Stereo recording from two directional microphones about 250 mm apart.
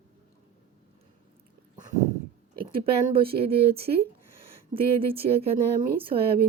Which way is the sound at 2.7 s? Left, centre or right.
Right.